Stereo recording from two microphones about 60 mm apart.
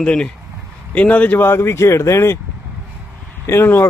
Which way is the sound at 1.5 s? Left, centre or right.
Left.